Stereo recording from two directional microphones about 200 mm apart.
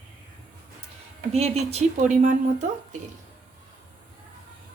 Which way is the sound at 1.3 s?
30° right (ahead or behind).